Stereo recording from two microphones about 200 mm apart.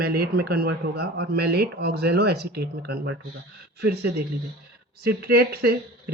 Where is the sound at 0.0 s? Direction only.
50° right (ahead or behind).